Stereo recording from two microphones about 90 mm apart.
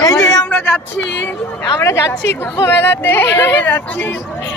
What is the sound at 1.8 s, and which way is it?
Speech, 35° left (ahead or behind).